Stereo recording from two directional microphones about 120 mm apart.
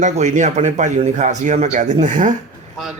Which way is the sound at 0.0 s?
80° right.